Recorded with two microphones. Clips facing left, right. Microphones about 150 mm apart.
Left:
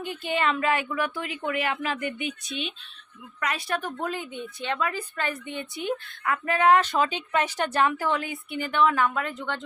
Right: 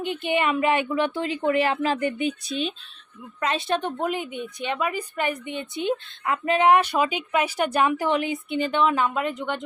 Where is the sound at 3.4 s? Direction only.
25° right (ahead or behind).